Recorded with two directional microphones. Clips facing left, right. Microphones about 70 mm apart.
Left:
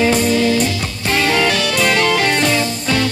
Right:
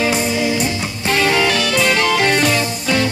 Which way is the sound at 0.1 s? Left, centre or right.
Centre.